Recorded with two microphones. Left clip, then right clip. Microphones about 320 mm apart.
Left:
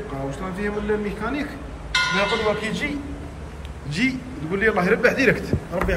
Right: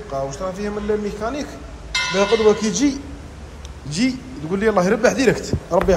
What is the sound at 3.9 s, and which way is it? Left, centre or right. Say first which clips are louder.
A man's voice: right 1 dB; centre.